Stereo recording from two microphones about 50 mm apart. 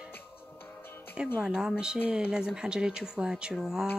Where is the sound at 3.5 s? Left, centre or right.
Centre.